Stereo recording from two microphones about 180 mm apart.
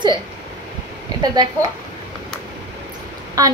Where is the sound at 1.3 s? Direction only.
20° right (ahead or behind).